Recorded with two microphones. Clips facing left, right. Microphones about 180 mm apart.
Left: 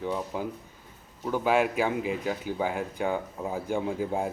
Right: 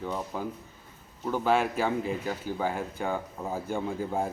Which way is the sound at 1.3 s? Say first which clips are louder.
Left 1 dB; 15° left (ahead or behind).